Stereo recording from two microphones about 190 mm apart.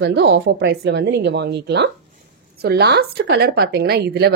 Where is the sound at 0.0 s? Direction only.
60° right (ahead or behind).